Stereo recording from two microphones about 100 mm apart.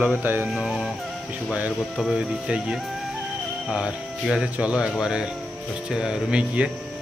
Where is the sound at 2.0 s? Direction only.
5° right (ahead or behind).